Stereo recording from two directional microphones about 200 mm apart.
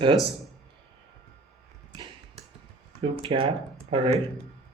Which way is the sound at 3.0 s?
30° right (ahead or behind).